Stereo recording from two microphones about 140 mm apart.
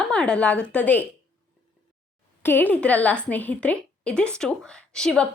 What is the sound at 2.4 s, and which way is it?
A woman's voice, 15° left (ahead or behind).